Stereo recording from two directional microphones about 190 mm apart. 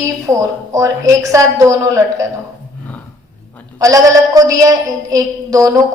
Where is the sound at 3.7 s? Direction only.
20° right (ahead or behind).